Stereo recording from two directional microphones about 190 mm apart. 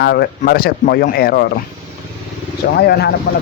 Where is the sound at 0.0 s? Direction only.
55° left (ahead or behind).